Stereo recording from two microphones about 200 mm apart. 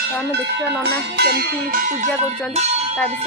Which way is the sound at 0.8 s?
55° right (ahead or behind).